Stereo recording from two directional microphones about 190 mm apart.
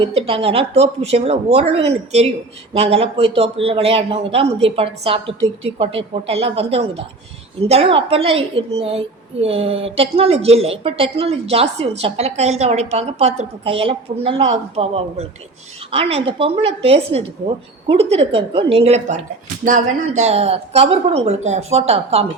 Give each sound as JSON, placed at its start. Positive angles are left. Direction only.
{"t": 0.1, "sound": "a woman's voice", "side_deg": -30}